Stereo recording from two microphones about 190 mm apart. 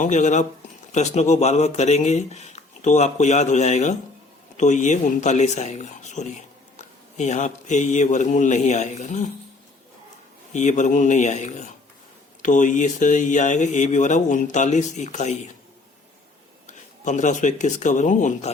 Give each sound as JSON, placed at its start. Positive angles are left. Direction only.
{"t": 0.0, "sound": "speech", "side_deg": 40}
{"t": 10.5, "sound": "speech", "side_deg": 40}
{"t": 16.6, "sound": "speech", "side_deg": 40}